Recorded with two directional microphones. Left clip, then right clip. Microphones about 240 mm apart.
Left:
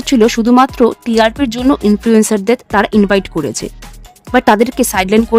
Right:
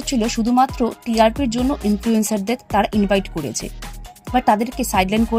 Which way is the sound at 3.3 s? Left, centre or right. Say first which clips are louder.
Left 8 dB; left.